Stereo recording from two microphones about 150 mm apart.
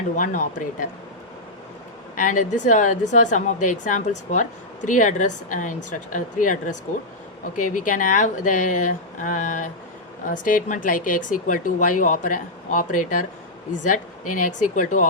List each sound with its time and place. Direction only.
0.2 s speech: 60° left (ahead or behind)
2.1 s speech: 60° left (ahead or behind)